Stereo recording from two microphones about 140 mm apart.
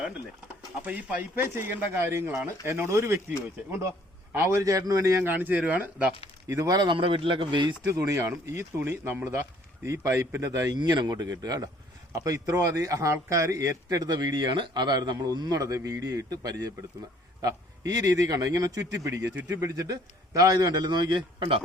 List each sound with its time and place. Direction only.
0.9 s a man's voice: 10° right (ahead or behind)
4.3 s a man's voice: 20° right (ahead or behind)
6.5 s speech: 25° right (ahead or behind)
7.9 s a man's voice: 20° right (ahead or behind)